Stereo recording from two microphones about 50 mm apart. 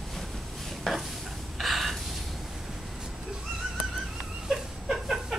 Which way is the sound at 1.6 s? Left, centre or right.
Centre.